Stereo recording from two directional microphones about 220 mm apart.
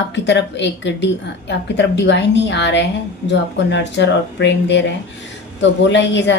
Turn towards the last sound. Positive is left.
turn(degrees=55)  # may be behind; listen again after turning